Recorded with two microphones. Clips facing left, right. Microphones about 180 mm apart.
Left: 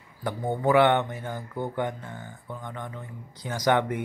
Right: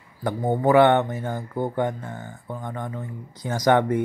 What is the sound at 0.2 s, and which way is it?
Speech, 45° right (ahead or behind).